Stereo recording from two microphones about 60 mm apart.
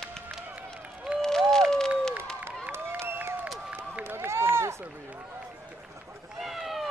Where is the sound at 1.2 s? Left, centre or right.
Centre.